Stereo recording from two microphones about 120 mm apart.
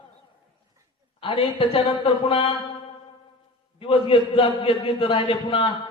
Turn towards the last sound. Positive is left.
turn(degrees=45)  # may be behind; listen again after turning